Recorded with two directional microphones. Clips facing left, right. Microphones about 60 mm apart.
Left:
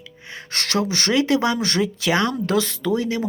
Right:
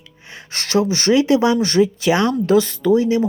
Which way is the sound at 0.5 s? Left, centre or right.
Centre.